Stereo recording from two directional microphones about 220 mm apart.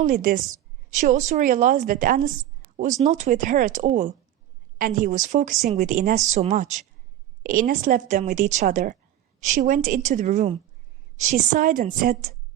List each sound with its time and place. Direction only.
0.0 s speech: 35° right (ahead or behind)